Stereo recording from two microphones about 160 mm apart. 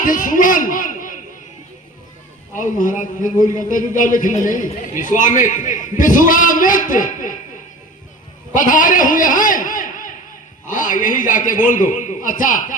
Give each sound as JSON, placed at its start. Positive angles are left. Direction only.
{"t": 0.0, "sound": "a man's voice", "side_deg": 55}
{"t": 2.6, "sound": "a man's voice", "side_deg": 55}
{"t": 8.5, "sound": "a man's voice", "side_deg": 55}